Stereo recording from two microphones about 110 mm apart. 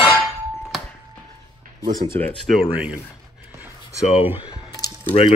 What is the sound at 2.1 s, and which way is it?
Speech, 20° left (ahead or behind).